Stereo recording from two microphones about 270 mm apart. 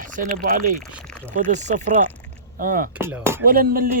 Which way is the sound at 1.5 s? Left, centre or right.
Right.